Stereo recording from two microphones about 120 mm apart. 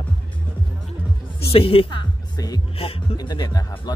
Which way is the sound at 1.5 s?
50° left (ahead or behind).